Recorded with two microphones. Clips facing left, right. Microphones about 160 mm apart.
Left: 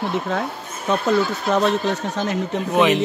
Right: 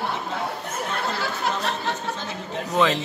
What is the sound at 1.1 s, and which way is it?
Speech, 70° left (ahead or behind).